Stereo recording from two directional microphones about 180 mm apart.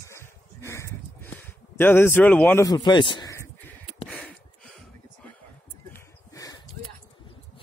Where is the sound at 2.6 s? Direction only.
20° left (ahead or behind); by 4.9 s 5° left (ahead or behind).